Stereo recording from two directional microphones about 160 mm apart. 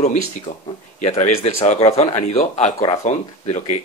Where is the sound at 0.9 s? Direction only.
50° left (ahead or behind).